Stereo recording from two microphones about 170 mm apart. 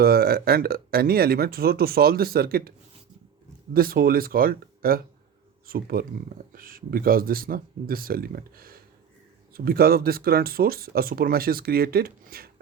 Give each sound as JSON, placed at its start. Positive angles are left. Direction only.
{"t": 0.0, "sound": "speech", "side_deg": -65}
{"t": 3.8, "sound": "speech", "side_deg": -60}